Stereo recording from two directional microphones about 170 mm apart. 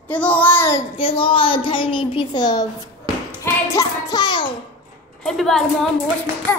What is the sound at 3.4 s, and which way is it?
Child singing, 20° left (ahead or behind).